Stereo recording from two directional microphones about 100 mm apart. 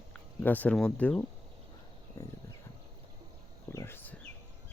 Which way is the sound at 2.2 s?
35° left (ahead or behind).